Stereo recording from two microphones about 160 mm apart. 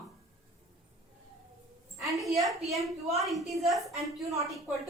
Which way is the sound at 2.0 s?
Centre (ahead or behind).